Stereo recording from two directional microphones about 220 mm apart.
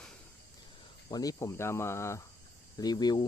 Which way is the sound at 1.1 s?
15° left (ahead or behind).